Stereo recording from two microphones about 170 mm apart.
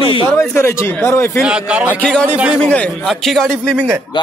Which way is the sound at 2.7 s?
5° left (ahead or behind).